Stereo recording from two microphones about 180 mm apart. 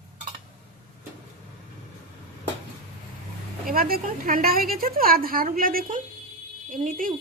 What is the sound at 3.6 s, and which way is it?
A woman's voice, 55° right (ahead or behind).